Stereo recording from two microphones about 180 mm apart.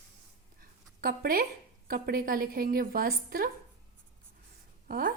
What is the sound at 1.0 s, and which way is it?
A woman's voice, 55° right (ahead or behind).